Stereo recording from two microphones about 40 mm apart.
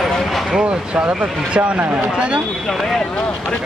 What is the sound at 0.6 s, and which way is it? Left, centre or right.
Speech, right.